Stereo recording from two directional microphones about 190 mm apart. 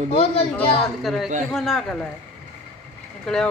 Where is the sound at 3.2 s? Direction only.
5° left (ahead or behind).